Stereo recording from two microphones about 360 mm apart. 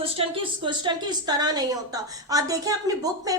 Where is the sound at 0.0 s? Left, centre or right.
Centre.